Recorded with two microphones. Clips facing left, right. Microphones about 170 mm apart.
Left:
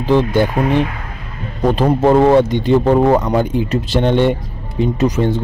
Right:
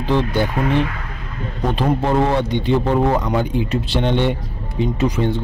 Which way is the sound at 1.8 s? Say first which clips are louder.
Left 6 dB; 45° left (ahead or behind).